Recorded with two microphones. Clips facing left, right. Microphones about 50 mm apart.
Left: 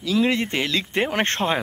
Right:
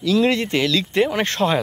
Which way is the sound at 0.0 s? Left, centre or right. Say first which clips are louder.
Right 3 dB; centre.